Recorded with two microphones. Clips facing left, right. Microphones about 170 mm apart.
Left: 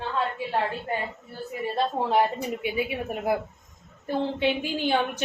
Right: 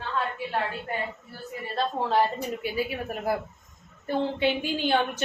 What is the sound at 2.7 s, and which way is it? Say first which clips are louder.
Speech: left 1 dB; 20° left (ahead or behind).